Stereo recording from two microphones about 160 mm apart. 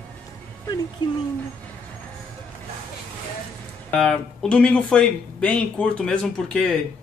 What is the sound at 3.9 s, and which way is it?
Speech, centre (ahead or behind).